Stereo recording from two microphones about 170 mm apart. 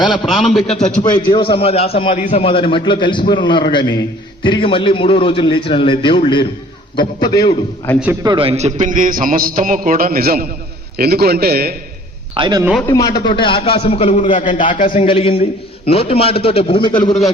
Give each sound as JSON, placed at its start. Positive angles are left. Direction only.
{"t": 0.3, "sound": "a man's voice", "side_deg": 0}
{"t": 1.2, "sound": "a man's voice", "side_deg": 30}
{"t": 8.2, "sound": "a man's voice", "side_deg": -30}
{"t": 12.4, "sound": "a man's voice", "side_deg": -25}
{"t": 12.9, "sound": "a man's voice", "side_deg": 20}
{"t": 15.0, "sound": "a man's voice", "side_deg": 35}